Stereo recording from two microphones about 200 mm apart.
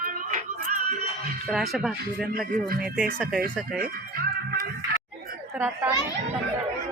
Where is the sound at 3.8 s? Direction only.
50° right (ahead or behind).